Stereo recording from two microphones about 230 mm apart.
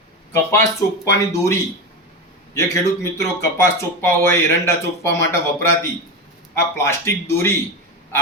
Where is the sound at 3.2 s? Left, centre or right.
Centre.